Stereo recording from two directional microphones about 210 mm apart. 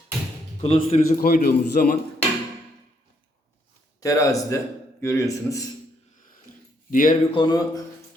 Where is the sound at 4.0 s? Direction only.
15° left (ahead or behind).